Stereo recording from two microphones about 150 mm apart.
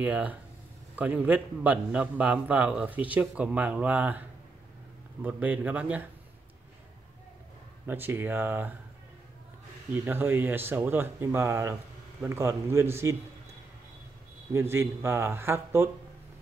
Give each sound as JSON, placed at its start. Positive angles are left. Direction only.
{"t": 0.0, "sound": "a man's voice", "side_deg": -10}
{"t": 5.2, "sound": "a man's voice", "side_deg": -10}
{"t": 7.8, "sound": "a man's voice", "side_deg": -15}
{"t": 10.0, "sound": "a man's voice", "side_deg": -15}
{"t": 14.5, "sound": "a man's voice", "side_deg": -15}